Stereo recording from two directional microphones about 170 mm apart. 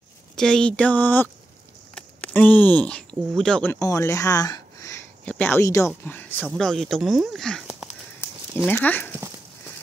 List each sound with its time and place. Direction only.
0.4 s speech: 5° left (ahead or behind); by 4.9 s 20° left (ahead or behind)
5.2 s speech: 10° left (ahead or behind)
8.6 s speech: 10° left (ahead or behind)